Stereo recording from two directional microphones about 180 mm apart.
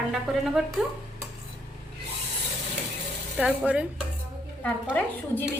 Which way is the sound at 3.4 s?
5° right (ahead or behind).